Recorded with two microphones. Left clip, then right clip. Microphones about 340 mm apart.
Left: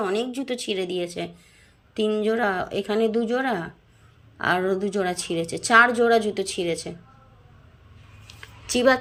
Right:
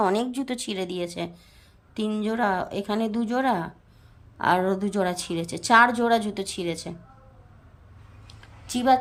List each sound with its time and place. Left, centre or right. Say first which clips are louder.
0.0 s a woman's voice: right 2 dB; centre
8.6 s a woman's voice: left 1 dB; centre